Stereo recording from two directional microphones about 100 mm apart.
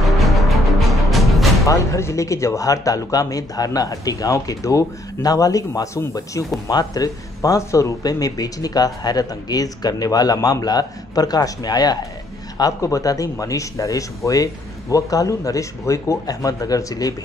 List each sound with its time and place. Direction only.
0.0 s music: centre (ahead or behind)
1.6 s speech: 30° left (ahead or behind)